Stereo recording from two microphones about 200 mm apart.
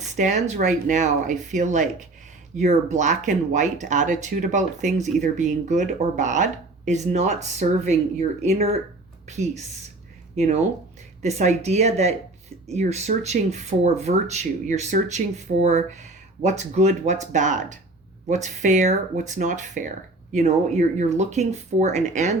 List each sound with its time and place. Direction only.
0.2 s speech: 35° right (ahead or behind)